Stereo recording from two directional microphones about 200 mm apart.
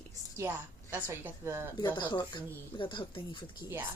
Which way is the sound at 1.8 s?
25° left (ahead or behind).